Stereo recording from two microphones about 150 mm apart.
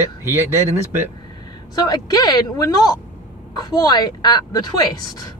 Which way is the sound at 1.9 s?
25° left (ahead or behind).